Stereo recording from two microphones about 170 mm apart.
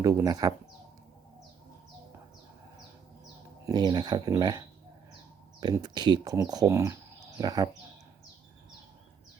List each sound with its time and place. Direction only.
0.0 s speech: 20° right (ahead or behind)
3.7 s speech: 25° right (ahead or behind)